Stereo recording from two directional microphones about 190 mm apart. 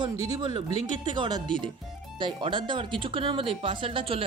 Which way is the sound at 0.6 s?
40° left (ahead or behind).